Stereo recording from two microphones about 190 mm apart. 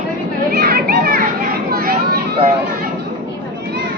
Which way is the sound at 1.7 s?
55° right (ahead or behind).